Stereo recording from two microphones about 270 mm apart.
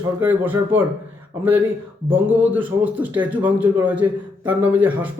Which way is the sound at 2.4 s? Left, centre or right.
Centre.